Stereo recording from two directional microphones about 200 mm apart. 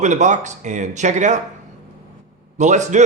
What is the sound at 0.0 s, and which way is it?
Speech, 35° right (ahead or behind).